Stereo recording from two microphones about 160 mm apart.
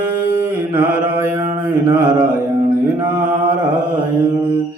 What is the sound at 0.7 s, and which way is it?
Mantra, 10° right (ahead or behind).